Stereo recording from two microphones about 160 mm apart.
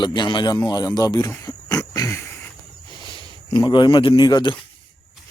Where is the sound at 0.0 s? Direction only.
30° left (ahead or behind).